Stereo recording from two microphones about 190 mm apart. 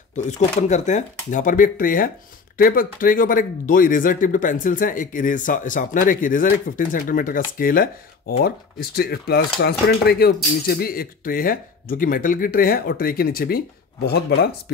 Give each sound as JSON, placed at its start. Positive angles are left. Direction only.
{"t": 0.1, "sound": "speech", "side_deg": 35}